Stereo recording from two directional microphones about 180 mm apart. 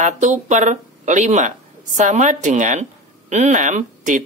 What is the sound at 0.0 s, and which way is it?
Speech, 40° right (ahead or behind).